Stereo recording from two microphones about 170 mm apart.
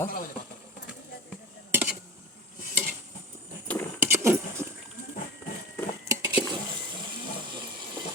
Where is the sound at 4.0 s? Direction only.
15° right (ahead or behind).